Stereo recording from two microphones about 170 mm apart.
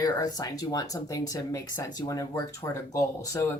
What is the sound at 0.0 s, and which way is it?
Speech, 25° left (ahead or behind).